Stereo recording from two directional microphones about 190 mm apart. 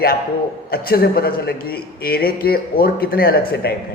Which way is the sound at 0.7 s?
55° left (ahead or behind).